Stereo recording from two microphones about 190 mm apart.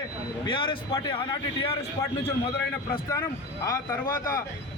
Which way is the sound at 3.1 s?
15° left (ahead or behind).